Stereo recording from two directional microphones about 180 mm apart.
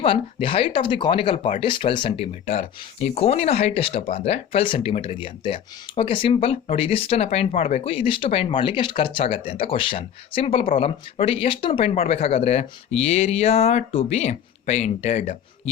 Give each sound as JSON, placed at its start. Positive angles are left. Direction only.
{"t": 0.0, "sound": "speech", "side_deg": 30}